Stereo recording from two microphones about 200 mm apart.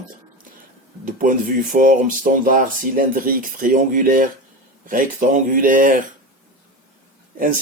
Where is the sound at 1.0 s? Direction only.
40° right (ahead or behind).